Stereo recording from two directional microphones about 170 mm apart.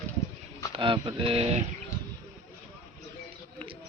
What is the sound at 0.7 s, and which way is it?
Speech, 30° right (ahead or behind).